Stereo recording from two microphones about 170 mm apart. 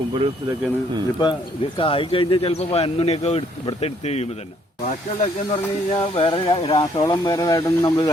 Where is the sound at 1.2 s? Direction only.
30° left (ahead or behind).